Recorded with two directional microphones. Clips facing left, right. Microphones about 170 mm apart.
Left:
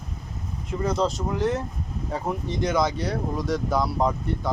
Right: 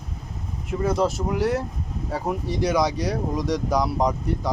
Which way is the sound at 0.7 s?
5° right (ahead or behind).